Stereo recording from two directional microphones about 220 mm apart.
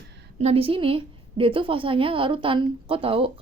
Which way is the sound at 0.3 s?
25° right (ahead or behind).